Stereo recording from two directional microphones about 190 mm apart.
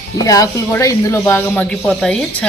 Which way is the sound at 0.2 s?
20° left (ahead or behind).